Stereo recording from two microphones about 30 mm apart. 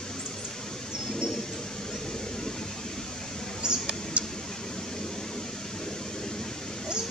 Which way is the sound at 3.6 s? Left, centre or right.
Right.